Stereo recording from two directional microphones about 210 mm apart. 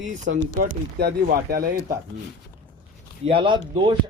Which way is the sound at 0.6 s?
45° right (ahead or behind).